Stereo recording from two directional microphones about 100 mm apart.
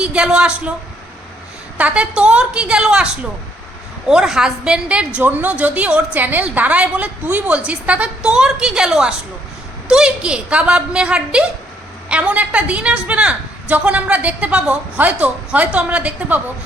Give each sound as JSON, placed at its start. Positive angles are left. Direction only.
{"t": 0.0, "sound": "a woman's voice", "side_deg": -10}
{"t": 1.8, "sound": "a woman's voice", "side_deg": -10}
{"t": 4.1, "sound": "a woman's voice", "side_deg": -5}